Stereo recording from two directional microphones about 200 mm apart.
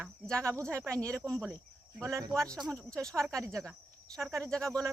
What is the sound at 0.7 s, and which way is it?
Speech, 15° right (ahead or behind).